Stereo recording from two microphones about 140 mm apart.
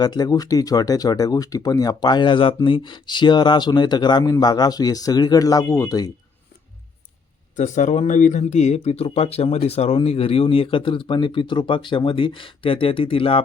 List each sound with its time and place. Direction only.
0.0 s speech: 30° left (ahead or behind)
7.5 s speech: 60° left (ahead or behind); by 13.4 s 40° left (ahead or behind)